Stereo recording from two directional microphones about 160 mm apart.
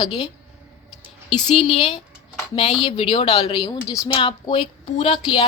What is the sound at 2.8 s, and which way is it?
A woman's voice, 35° left (ahead or behind).